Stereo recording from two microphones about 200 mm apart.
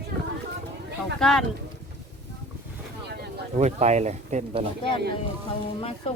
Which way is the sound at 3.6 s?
35° right (ahead or behind).